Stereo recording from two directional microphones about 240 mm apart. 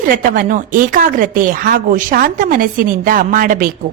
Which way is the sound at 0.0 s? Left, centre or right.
Right.